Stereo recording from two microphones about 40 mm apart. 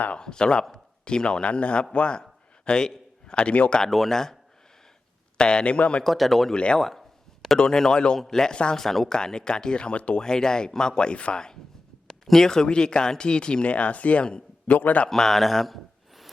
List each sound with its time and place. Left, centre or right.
0.2 s speech: left
2.6 s a man's voice: centre
3.8 s speech: centre
4.1 s speech: centre
5.4 s speech: left
6.0 s speech: centre
6.5 s speech: left
6.7 s speech: centre; by 10.2 s left
10.2 s speech: centre
12.0 s speech: centre; by 14.3 s left
14.3 s a sound: left
14.8 s a man's voice: left
15.1 s speech: centre